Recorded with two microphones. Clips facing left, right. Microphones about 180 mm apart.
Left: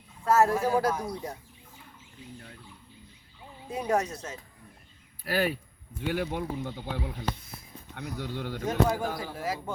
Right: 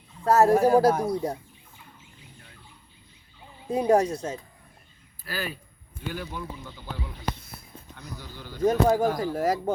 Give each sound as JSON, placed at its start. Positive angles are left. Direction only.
{"t": 0.3, "sound": "speech", "side_deg": -35}
{"t": 3.7, "sound": "speech", "side_deg": -35}
{"t": 5.2, "sound": "speech", "side_deg": 65}
{"t": 8.6, "sound": "speech", "side_deg": -40}